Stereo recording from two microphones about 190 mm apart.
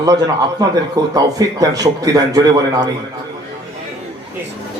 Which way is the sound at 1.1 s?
20° right (ahead or behind).